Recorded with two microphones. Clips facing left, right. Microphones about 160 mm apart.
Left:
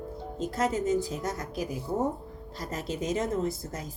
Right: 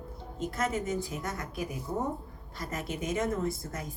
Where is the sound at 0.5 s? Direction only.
30° left (ahead or behind).